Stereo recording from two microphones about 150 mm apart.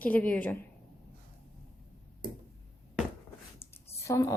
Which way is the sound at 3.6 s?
15° left (ahead or behind).